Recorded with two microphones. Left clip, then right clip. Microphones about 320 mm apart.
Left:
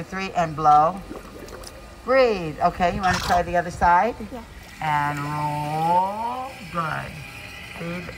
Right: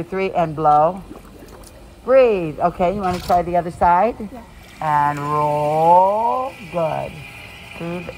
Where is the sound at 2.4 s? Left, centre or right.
Right.